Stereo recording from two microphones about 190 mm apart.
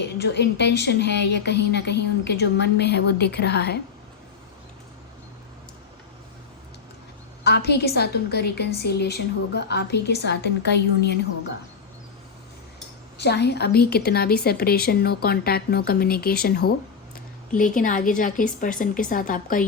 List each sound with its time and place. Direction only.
0.2 s a woman's voice: 65° left (ahead or behind)
7.4 s a woman's voice: 60° left (ahead or behind)
13.1 s a woman's voice: 60° left (ahead or behind); by 19.6 s 45° left (ahead or behind)